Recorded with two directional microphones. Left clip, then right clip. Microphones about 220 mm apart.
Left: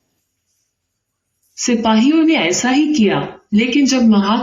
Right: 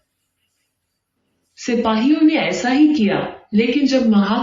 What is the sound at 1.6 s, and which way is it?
A man's voice, 45° left (ahead or behind).